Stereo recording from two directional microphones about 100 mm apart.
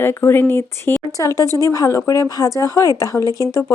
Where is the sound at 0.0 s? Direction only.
25° left (ahead or behind).